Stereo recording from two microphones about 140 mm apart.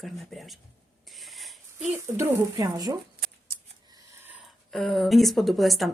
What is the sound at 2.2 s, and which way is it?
Speech, 20° right (ahead or behind).